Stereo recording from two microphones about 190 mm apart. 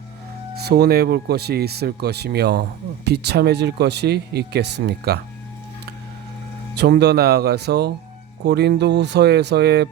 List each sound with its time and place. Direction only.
0.6 s speech: 55° right (ahead or behind)
6.7 s speech: 60° right (ahead or behind)